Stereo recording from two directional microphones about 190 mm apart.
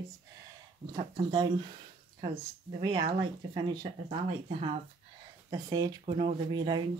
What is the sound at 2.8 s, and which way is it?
Speech, 25° right (ahead or behind).